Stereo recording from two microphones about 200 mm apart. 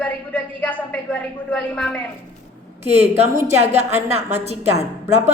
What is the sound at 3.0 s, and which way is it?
A woman's voice, 30° right (ahead or behind).